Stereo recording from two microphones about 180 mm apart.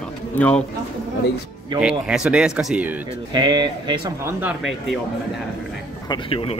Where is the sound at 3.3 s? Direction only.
25° right (ahead or behind).